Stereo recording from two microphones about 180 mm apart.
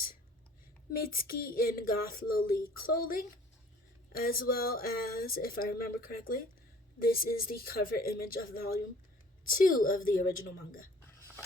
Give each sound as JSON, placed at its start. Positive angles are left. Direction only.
{"t": 0.9, "sound": "a woman's voice", "side_deg": 55}